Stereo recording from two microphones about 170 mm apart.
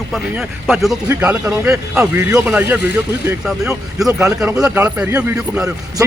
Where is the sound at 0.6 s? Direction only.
Centre (ahead or behind).